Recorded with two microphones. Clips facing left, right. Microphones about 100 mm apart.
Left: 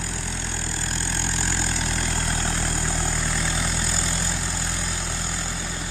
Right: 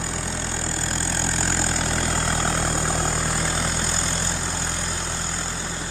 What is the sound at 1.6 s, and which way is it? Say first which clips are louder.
Vehicle: right 3 dB; 40° right (ahead or behind).